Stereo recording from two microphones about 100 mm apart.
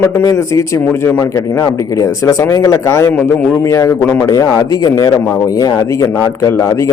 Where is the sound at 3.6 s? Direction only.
35° left (ahead or behind).